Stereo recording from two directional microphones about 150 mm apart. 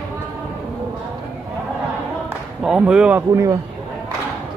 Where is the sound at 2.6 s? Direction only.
5° right (ahead or behind).